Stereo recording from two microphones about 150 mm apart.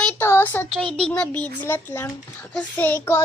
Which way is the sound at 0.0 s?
15° left (ahead or behind).